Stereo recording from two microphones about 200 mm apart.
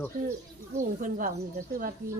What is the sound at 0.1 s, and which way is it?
Speech, 45° right (ahead or behind).